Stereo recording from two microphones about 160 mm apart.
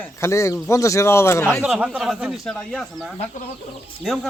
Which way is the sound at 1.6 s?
5° right (ahead or behind).